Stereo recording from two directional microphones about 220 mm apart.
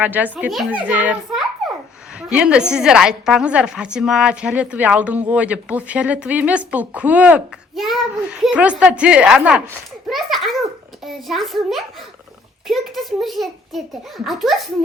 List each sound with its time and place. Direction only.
0.0 s a child's voice: 10° right (ahead or behind)